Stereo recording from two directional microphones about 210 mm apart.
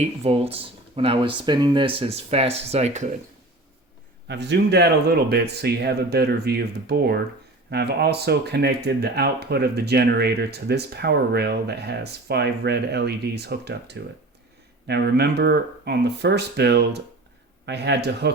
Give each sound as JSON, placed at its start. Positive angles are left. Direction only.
{"t": 0.0, "sound": "speech", "side_deg": -30}
{"t": 4.3, "sound": "speech", "side_deg": -55}